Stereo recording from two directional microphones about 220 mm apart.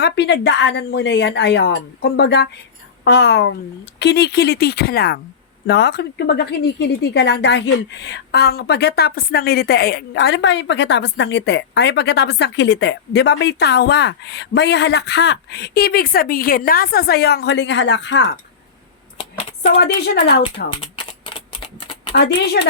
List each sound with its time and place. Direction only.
0.0 s a woman's voice: 50° left (ahead or behind)
19.8 s a woman's voice: 50° left (ahead or behind)
20.7 s typing: 20° left (ahead or behind)
22.1 s a woman's voice: 50° left (ahead or behind)